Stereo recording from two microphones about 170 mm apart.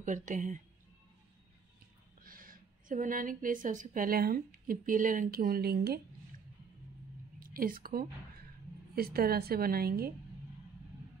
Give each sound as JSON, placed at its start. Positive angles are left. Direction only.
{"t": 0.0, "sound": "speech", "side_deg": -50}
{"t": 2.2, "sound": "a woman's voice", "side_deg": -55}
{"t": 7.3, "sound": "a woman's voice", "side_deg": -55}